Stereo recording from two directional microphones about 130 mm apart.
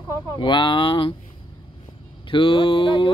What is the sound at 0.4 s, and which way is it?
Speech, 35° left (ahead or behind).